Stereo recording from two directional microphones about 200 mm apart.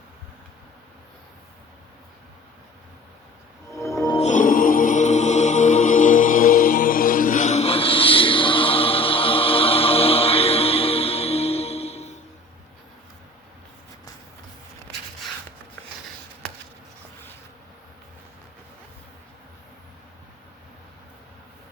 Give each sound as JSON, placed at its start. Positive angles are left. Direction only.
{"t": 3.8, "sound": "music", "side_deg": 15}
{"t": 4.2, "sound": "music", "side_deg": 40}